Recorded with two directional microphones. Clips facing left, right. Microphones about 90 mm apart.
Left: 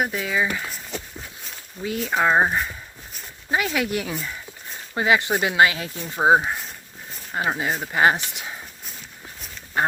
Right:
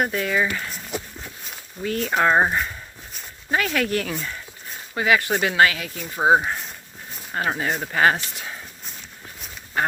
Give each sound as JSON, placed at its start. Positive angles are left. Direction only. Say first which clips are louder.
{"t": 0.0, "sound": "speech", "louder": "right 1 dB", "side_deg": 5}
{"t": 1.8, "sound": "speech", "louder": "right 1 dB", "side_deg": 5}
{"t": 5.7, "sound": "speech", "louder": "left 1 dB", "side_deg": 30}
{"t": 6.1, "sound": "speech", "louder": "even", "side_deg": 10}
{"t": 7.9, "sound": "speech", "louder": "left 1 dB", "side_deg": 15}
{"t": 9.8, "sound": "speech", "louder": "left 1 dB", "side_deg": 25}